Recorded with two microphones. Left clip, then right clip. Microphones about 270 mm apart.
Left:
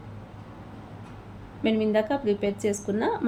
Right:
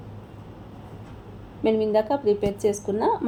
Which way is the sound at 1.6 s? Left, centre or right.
Centre.